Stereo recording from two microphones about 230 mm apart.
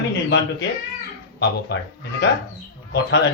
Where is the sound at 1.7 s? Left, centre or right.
Left.